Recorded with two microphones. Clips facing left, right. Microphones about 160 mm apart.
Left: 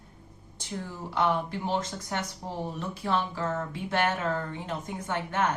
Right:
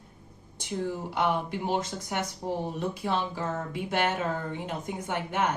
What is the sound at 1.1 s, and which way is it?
A woman's voice, 15° right (ahead or behind).